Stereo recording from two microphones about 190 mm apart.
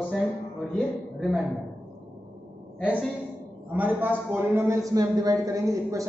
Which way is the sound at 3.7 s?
10° right (ahead or behind).